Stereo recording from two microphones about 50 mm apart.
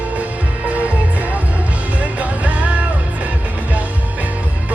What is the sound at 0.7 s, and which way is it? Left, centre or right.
Music, right.